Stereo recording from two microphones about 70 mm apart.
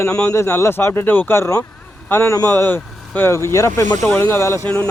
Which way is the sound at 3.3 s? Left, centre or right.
Left.